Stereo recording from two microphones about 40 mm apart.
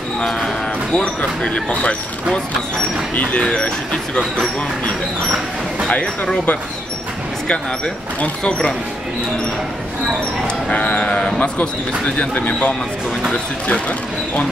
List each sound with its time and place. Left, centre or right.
0.2 s speech: centre
0.9 s speech: left
3.4 s speech: left
7.4 s speech: left
10.4 s speech: left